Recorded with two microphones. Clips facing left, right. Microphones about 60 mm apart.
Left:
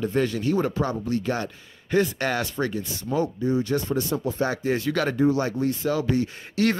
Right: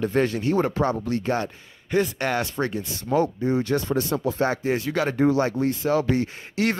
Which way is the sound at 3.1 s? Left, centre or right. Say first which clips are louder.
Right 2 dB; right.